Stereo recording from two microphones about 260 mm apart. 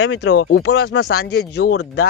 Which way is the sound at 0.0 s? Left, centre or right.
Left.